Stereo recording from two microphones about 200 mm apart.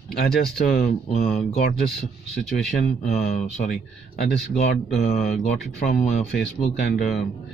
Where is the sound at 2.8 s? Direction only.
40° left (ahead or behind).